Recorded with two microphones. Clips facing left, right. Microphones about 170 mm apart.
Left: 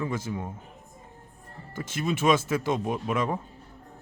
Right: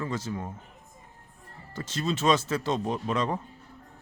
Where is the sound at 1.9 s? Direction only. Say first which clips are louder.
Left 1 dB; 15° left (ahead or behind).